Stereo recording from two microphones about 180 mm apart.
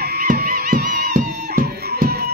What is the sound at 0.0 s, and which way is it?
Music, 60° right (ahead or behind).